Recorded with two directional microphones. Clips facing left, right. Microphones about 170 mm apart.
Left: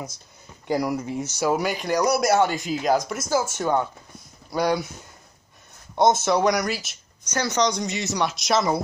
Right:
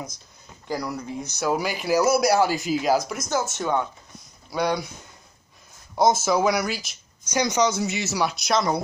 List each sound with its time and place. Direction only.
0.7 s speech: 15° left (ahead or behind)
1.4 s speech: centre (ahead or behind)
5.9 s speech: centre (ahead or behind)
7.2 s speech: 10° right (ahead or behind)